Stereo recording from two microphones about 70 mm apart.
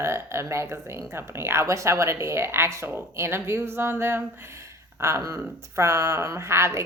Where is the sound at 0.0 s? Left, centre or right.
Right.